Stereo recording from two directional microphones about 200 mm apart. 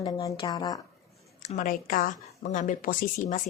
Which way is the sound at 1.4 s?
40° left (ahead or behind).